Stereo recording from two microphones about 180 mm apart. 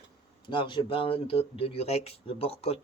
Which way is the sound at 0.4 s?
25° left (ahead or behind).